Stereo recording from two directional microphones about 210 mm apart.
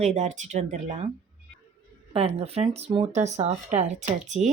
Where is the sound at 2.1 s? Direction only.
30° right (ahead or behind).